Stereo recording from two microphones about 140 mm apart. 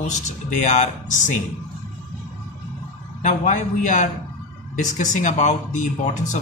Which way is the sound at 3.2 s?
65° left (ahead or behind).